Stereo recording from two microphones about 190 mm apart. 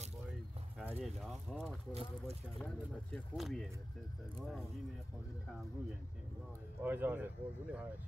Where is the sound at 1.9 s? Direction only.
35° right (ahead or behind).